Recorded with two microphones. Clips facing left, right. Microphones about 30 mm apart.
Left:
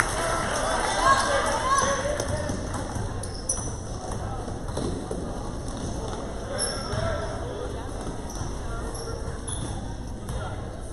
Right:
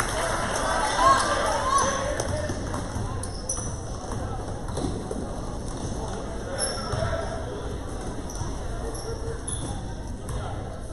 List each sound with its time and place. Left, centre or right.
0.0 s run: centre
0.6 s basketball bounce: centre
4.7 s a sound: centre
6.9 s basketball bounce: centre